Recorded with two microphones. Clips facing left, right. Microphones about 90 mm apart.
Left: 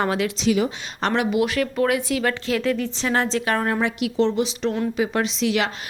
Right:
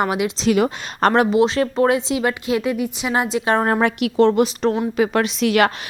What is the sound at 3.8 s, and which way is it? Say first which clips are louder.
Speech: right 5 dB; 55° right (ahead or behind).